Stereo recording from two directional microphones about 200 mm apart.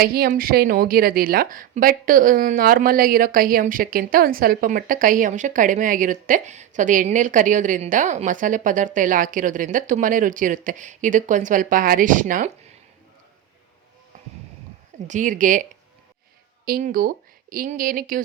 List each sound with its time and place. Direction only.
0.0 s a woman's voice: 50° right (ahead or behind)
15.0 s a woman's voice: 40° right (ahead or behind)
16.6 s speech: 45° right (ahead or behind)